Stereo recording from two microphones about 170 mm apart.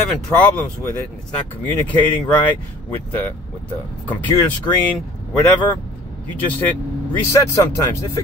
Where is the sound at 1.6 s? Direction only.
10° left (ahead or behind).